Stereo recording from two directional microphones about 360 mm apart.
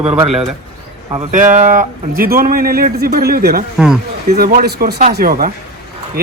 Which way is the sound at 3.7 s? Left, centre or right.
Centre.